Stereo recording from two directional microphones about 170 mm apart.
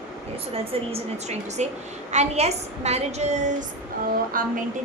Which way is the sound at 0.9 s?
40° right (ahead or behind).